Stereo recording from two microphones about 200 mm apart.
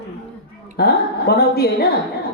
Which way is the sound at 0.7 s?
50° left (ahead or behind).